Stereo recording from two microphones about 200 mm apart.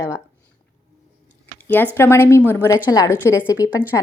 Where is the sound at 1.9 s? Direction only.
10° left (ahead or behind).